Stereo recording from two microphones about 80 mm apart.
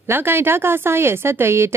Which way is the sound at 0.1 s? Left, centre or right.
Right.